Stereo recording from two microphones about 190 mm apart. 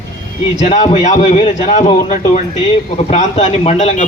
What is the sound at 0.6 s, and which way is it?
A man's voice, 35° left (ahead or behind).